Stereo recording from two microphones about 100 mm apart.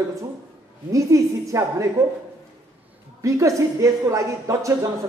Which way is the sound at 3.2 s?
30° right (ahead or behind).